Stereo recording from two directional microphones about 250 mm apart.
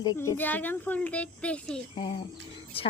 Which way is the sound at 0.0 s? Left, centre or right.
Centre.